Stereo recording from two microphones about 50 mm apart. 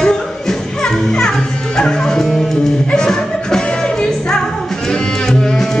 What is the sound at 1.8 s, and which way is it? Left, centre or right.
Music, centre.